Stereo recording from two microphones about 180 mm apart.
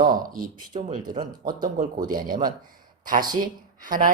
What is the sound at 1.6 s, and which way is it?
Speech, 50° right (ahead or behind).